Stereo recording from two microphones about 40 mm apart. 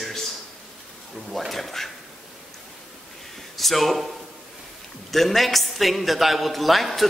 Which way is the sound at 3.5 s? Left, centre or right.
Centre.